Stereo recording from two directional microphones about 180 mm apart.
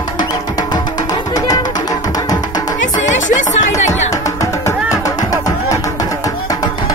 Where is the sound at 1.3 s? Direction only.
20° left (ahead or behind).